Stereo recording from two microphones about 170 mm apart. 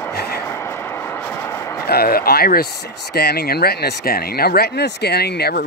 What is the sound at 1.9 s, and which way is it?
Speech, 60° left (ahead or behind).